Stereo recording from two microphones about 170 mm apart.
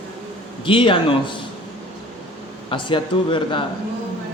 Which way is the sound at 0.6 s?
30° left (ahead or behind).